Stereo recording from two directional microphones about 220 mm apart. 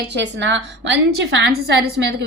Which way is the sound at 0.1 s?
55° right (ahead or behind).